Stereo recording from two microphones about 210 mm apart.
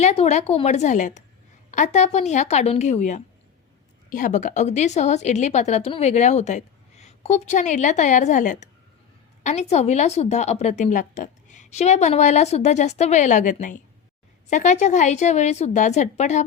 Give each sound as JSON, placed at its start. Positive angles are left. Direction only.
{"t": 0.0, "sound": "a woman's voice", "side_deg": 30}